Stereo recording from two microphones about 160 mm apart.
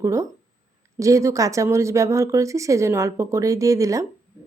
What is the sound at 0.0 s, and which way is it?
A woman's voice, 20° right (ahead or behind).